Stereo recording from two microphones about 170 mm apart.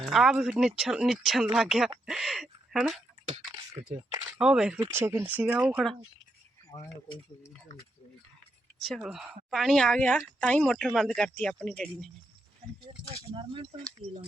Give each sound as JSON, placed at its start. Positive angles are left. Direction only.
{"t": 0.0, "sound": "speech", "side_deg": 0}
{"t": 3.2, "sound": "speech", "side_deg": -30}
{"t": 4.4, "sound": "speech", "side_deg": -5}
{"t": 4.8, "sound": "speech", "side_deg": -15}
{"t": 6.7, "sound": "speech", "side_deg": 25}
{"t": 8.8, "sound": "speech", "side_deg": 0}
{"t": 13.3, "sound": "speech", "side_deg": -30}